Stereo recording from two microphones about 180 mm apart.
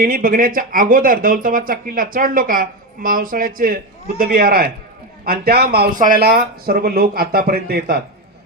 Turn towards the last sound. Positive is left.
turn(degrees=-55)  # may be behind; listen again after turning